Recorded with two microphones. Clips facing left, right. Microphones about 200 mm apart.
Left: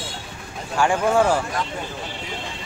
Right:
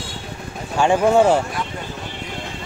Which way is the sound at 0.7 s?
25° right (ahead or behind).